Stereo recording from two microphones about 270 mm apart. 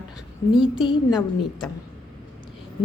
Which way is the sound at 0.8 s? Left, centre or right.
Centre.